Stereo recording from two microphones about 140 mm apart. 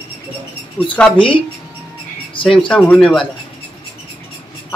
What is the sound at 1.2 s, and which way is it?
Speech, 40° left (ahead or behind).